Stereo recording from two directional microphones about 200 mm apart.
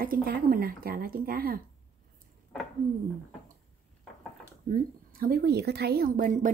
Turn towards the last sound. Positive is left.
turn(degrees=-40)  # may be behind; listen again after turning